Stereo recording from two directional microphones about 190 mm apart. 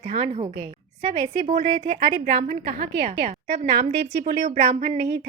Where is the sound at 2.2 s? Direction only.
50° right (ahead or behind).